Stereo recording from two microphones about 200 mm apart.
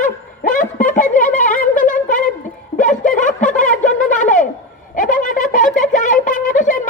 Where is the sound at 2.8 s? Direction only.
40° left (ahead or behind).